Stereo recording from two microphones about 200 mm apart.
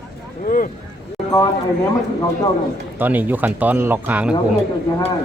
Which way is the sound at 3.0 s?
10° right (ahead or behind).